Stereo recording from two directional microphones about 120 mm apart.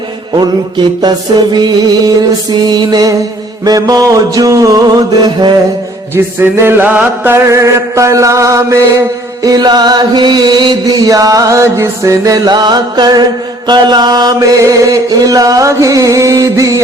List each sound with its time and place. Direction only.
1.0 s music: 35° right (ahead or behind)
6.1 s chant: 20° right (ahead or behind)
9.4 s music: 35° right (ahead or behind)
13.7 s chant: 35° right (ahead or behind)